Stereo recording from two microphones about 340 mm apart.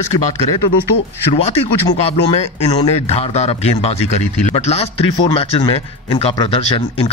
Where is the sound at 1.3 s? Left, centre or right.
Centre.